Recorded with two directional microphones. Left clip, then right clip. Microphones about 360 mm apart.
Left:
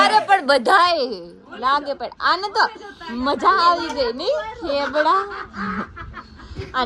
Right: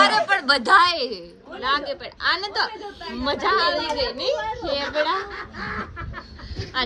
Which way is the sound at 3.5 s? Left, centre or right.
Left.